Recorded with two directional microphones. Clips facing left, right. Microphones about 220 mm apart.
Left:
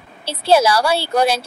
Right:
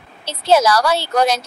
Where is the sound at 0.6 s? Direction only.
30° left (ahead or behind).